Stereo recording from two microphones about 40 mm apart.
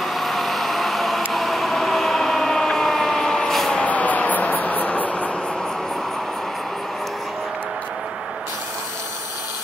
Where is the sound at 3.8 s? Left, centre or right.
Left.